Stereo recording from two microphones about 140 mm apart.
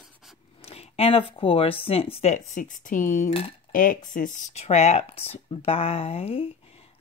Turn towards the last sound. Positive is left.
turn(degrees=45)  # may be behind; listen again after turning